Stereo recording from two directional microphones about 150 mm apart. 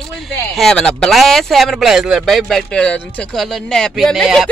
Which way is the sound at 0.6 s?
5° left (ahead or behind).